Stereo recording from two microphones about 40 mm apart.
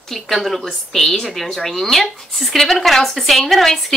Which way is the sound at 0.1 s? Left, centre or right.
Centre.